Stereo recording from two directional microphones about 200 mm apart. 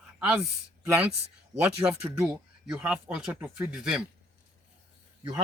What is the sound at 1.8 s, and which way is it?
Speech, 15° right (ahead or behind).